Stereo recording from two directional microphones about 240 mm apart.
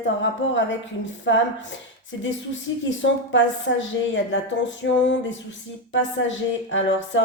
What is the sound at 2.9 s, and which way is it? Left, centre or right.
Speech, left.